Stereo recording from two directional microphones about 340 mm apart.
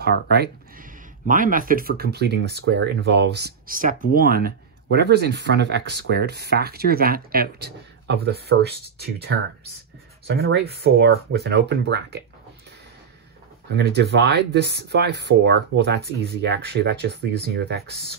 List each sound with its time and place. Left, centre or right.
0.0 s speech: right
13.7 s speech: right